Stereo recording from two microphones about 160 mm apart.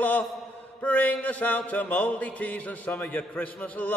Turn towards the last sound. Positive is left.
turn(degrees=10)  # may be behind; listen again after turning